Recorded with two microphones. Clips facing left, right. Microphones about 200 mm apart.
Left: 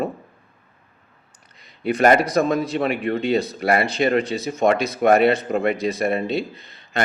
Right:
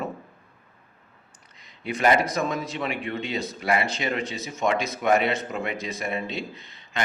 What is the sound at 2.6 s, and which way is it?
Speech, 40° left (ahead or behind).